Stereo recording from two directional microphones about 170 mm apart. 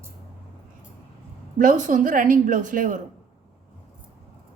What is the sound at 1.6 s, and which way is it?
A woman's voice, 50° right (ahead or behind).